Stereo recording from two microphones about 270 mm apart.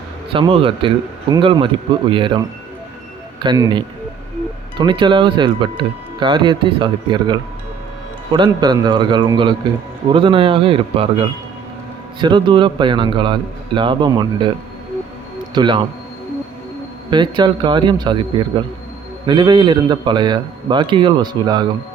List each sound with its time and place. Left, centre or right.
0.3 s speech: centre
3.4 s a man's voice: centre
15.5 s speech: centre
17.1 s speech: centre